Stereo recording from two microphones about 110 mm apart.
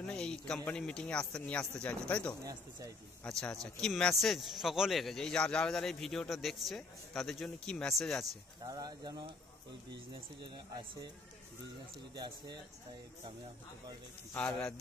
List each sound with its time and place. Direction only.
0.0 s a man's voice: 5° left (ahead or behind)
8.6 s speech: 35° right (ahead or behind)
10.4 s speech: 35° right (ahead or behind)